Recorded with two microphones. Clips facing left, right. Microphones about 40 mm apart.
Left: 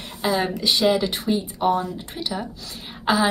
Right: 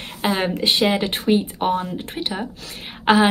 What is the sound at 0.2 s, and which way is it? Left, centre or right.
A woman's voice, right.